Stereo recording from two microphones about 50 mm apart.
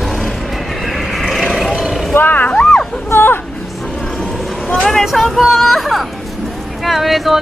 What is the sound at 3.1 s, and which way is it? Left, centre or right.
Music, left.